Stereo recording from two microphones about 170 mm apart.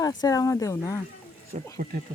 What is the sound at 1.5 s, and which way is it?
Speech, 40° right (ahead or behind).